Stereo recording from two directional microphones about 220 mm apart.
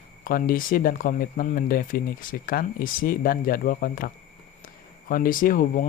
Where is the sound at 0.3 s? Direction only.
40° left (ahead or behind).